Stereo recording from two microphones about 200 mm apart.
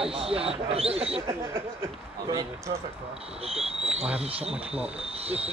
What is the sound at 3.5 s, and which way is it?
Speech, 30° right (ahead or behind).